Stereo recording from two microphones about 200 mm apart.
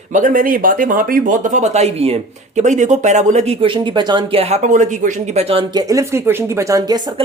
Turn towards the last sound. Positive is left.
turn(degrees=-20)  # may be behind; listen again after turning